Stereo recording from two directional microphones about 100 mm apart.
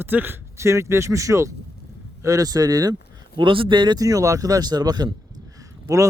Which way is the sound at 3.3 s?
60° right (ahead or behind).